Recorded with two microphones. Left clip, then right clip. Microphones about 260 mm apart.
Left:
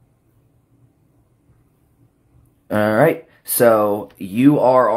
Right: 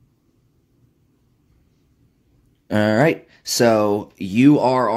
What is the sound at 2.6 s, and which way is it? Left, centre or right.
Speech, centre.